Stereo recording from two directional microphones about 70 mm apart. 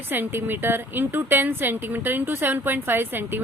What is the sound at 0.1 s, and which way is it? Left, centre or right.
Speech, right.